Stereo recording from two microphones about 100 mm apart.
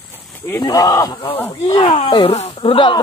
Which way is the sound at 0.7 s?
40° left (ahead or behind).